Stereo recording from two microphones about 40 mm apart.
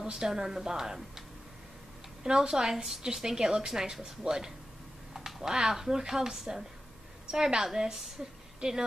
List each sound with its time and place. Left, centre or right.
0.0 s a woman's voice: centre
2.2 s a woman's voice: centre